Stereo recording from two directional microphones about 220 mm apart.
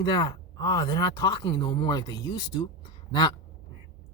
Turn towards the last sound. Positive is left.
turn(degrees=20)  # may be behind; listen again after turning